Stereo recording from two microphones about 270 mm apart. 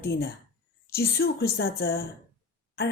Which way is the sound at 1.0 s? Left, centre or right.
Left.